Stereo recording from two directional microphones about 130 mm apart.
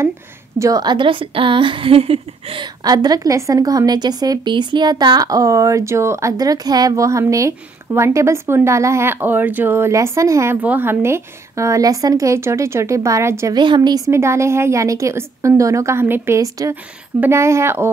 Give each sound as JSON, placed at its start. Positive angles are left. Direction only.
{"t": 0.6, "sound": "a woman's voice", "side_deg": -30}
{"t": 13.6, "sound": "a woman's voice", "side_deg": -35}